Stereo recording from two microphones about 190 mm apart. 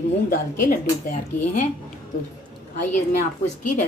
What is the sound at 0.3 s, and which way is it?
A woman's voice, 45° left (ahead or behind).